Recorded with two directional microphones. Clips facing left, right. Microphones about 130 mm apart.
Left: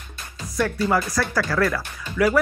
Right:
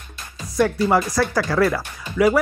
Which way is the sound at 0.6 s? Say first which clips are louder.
Right 4 dB; 20° right (ahead or behind).